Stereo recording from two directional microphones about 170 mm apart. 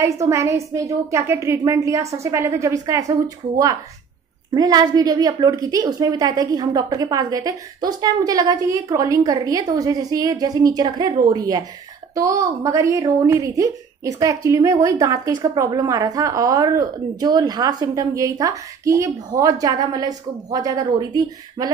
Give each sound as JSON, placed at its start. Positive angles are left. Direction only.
{"t": 0.0, "sound": "a woman's voice", "side_deg": -15}
{"t": 4.6, "sound": "a woman's voice", "side_deg": -25}